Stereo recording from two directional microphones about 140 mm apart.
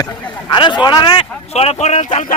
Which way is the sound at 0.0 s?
30° left (ahead or behind).